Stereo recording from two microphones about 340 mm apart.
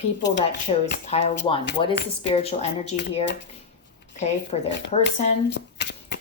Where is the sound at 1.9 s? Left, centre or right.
Left.